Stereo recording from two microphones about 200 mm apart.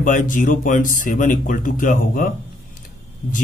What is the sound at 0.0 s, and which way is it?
Speech, 40° left (ahead or behind).